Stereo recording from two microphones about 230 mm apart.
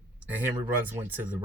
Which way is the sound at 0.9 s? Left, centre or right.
Centre.